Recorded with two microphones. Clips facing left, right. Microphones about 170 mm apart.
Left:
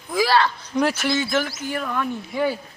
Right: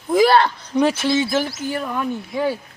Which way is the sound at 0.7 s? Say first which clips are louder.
Right 4 dB; 20° right (ahead or behind).